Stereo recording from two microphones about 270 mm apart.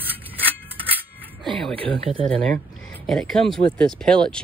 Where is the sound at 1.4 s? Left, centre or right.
Centre.